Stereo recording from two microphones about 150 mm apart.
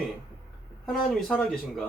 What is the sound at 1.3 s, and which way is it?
Speech, 5° left (ahead or behind).